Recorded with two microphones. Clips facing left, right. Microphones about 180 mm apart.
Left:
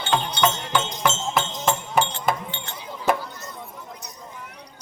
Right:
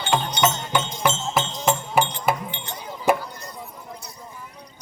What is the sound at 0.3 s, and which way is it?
Music, 15° right (ahead or behind).